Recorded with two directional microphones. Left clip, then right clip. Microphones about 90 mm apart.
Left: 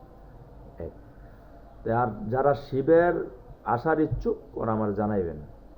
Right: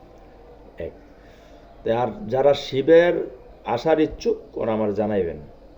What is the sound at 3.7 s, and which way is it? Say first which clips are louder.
Speech: right 5 dB; 25° right (ahead or behind).